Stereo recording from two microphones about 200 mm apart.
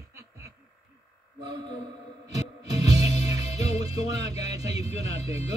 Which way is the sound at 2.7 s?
20° right (ahead or behind).